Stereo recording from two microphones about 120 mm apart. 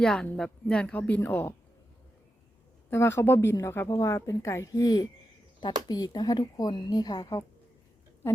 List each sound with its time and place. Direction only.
0.0 s speech: 5° left (ahead or behind)
2.9 s a woman's voice: 20° left (ahead or behind)